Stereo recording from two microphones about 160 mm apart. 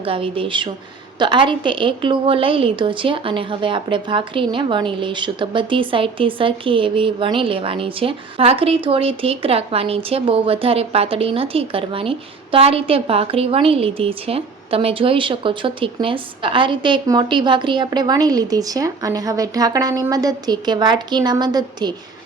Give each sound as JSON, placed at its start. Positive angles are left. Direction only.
{"t": 0.0, "sound": "a woman's voice", "side_deg": -35}